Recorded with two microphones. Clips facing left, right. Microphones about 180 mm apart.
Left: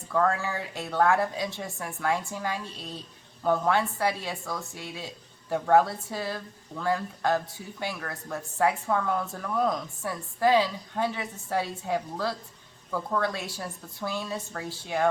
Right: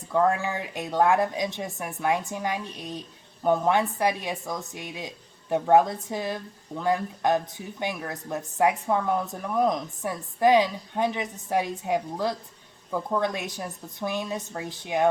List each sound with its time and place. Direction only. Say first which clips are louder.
0.1 s speech: right 3 dB; 15° right (ahead or behind)